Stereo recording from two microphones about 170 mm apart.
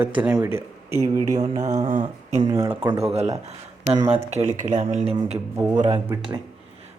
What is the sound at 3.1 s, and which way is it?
Speech, 40° right (ahead or behind).